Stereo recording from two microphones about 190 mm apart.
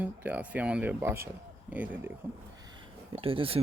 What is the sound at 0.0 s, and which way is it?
Speech, 10° right (ahead or behind).